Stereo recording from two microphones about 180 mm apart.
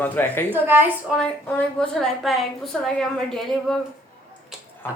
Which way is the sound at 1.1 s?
5° left (ahead or behind).